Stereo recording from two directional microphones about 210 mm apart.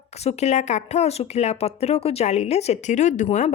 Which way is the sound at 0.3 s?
30° left (ahead or behind).